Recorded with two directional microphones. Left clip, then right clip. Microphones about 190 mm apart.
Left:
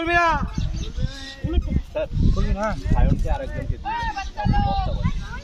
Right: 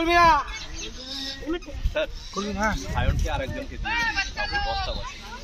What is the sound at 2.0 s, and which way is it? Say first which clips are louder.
Speech: even; 40° left (ahead or behind).